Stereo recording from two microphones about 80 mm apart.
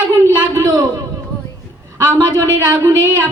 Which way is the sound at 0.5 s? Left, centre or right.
Right.